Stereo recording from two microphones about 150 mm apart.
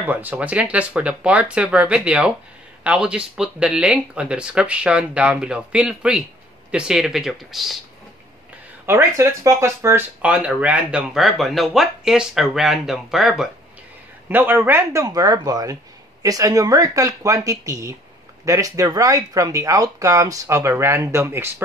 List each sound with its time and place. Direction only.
0.0 s speech: 10° right (ahead or behind)
8.8 s speech: 15° right (ahead or behind)
14.3 s speech: 15° right (ahead or behind)